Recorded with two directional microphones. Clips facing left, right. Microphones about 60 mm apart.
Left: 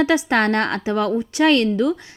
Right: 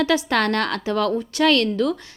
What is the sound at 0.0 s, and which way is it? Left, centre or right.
A woman's voice, left.